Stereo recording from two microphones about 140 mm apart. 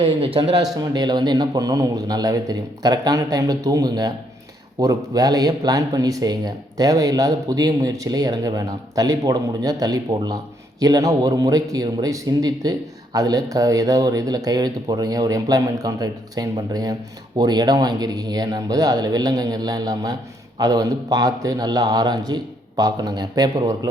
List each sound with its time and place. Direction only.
0.0 s a man's voice: 40° right (ahead or behind)
0.8 s speech: 30° right (ahead or behind)